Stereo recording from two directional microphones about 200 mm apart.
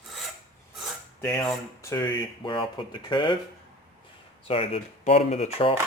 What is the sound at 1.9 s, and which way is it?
Speech, 20° left (ahead or behind).